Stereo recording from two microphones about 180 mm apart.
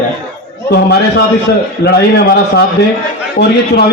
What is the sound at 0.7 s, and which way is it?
Speech, 65° left (ahead or behind).